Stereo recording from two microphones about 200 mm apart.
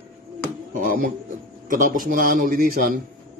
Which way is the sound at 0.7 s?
45° right (ahead or behind).